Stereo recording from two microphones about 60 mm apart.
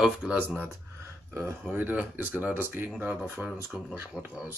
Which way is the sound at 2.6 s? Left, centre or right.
Right.